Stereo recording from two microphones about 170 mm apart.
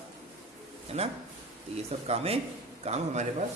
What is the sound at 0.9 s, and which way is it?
Speech, 40° right (ahead or behind).